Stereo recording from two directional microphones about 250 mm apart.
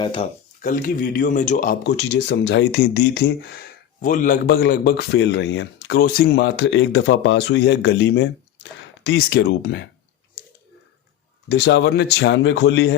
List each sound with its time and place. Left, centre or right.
0.0 s a sound: left
0.7 s speech: left
11.4 s speech: left